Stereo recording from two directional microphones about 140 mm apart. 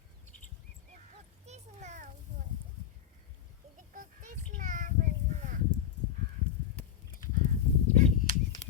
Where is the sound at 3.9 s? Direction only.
70° right (ahead or behind).